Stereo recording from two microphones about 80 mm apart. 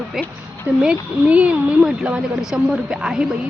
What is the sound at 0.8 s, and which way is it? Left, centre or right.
A woman's voice, centre.